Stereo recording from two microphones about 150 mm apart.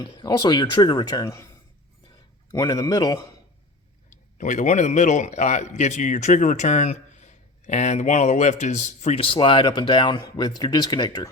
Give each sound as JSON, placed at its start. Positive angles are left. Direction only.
{"t": 0.0, "sound": "speech", "side_deg": 30}
{"t": 4.1, "sound": "a man's voice", "side_deg": 55}